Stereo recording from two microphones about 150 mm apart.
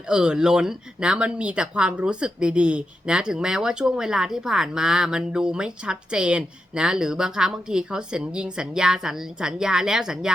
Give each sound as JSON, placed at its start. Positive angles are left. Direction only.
{"t": 0.1, "sound": "speech", "side_deg": -5}